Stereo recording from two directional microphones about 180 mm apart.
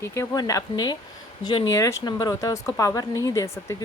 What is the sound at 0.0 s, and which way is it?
Speech, 15° left (ahead or behind).